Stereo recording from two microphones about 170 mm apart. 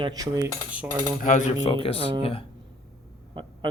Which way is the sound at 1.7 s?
35° left (ahead or behind).